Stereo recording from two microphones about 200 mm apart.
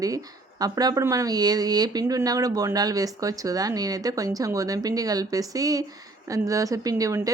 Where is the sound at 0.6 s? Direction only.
20° right (ahead or behind).